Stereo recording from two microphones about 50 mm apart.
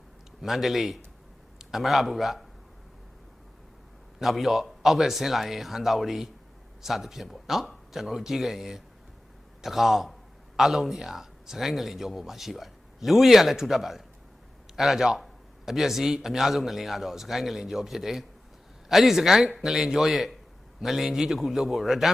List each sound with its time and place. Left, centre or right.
0.4 s a man's voice: centre
4.2 s a man's voice: centre